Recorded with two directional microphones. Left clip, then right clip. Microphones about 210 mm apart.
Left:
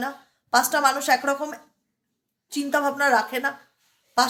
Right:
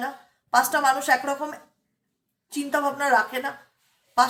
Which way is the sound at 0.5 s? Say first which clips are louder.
Even; 50° left (ahead or behind).